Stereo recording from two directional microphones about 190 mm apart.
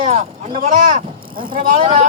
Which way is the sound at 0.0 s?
35° right (ahead or behind).